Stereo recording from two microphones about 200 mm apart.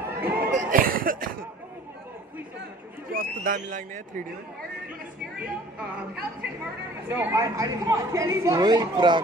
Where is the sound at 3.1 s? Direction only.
45° right (ahead or behind).